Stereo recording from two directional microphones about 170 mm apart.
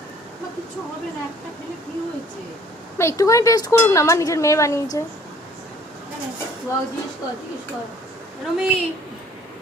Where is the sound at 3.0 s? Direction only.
15° left (ahead or behind).